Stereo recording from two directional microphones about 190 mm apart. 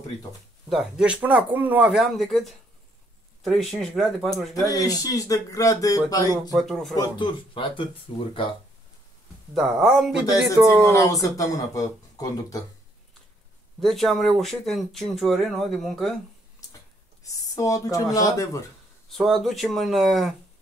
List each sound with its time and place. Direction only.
0.7 s speech: centre (ahead or behind)
4.6 s speech: 20° left (ahead or behind)
6.5 s speech: centre (ahead or behind)
7.0 s speech: 25° left (ahead or behind)
9.5 s speech: centre (ahead or behind)
10.9 s speech: 15° left (ahead or behind)
13.7 s speech: centre (ahead or behind)
17.2 s speech: 15° left (ahead or behind)
19.0 s speech: centre (ahead or behind)